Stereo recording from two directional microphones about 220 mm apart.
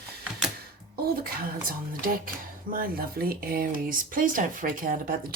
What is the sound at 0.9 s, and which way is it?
Speech, 45° right (ahead or behind).